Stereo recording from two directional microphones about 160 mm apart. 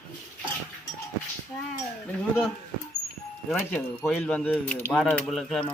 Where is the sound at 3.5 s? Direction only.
15° left (ahead or behind).